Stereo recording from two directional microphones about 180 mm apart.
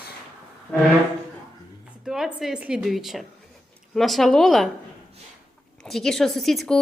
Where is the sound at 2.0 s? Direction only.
Centre (ahead or behind).